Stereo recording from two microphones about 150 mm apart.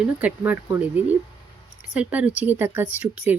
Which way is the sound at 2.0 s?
10° right (ahead or behind).